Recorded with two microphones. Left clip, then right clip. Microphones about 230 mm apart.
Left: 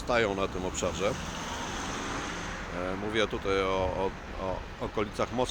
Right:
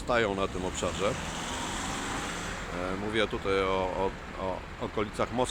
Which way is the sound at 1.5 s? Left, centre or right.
Right.